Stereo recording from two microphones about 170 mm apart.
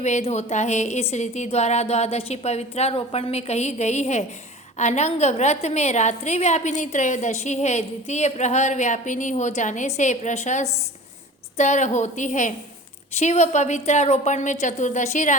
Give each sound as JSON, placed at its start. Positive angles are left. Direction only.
{"t": 0.0, "sound": "a woman's voice", "side_deg": 40}